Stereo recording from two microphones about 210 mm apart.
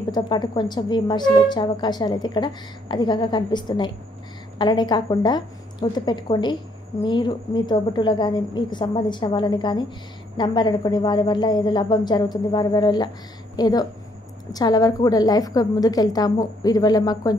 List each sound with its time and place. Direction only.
0.1 s a woman's voice: 20° left (ahead or behind)